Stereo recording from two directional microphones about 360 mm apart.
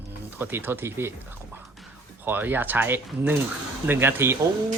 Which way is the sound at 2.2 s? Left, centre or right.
Centre.